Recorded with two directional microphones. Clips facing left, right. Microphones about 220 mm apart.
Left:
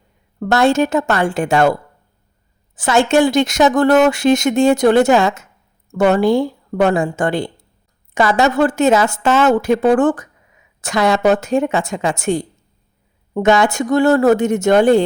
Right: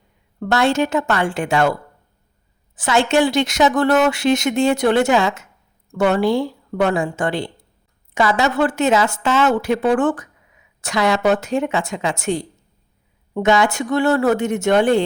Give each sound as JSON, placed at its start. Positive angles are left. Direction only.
{"t": 0.3, "sound": "speech", "side_deg": 45}
{"t": 2.7, "sound": "speech", "side_deg": 45}